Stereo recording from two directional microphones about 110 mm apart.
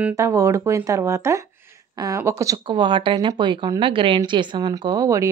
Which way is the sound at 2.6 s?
45° right (ahead or behind).